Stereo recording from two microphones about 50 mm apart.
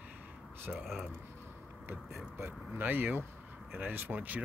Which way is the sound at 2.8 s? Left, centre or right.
Right.